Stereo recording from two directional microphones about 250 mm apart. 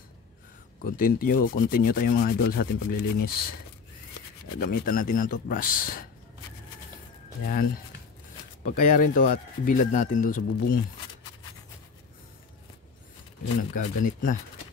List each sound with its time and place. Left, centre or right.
0.8 s speech: left
4.6 s speech: left
7.4 s speech: left
13.6 s speech: left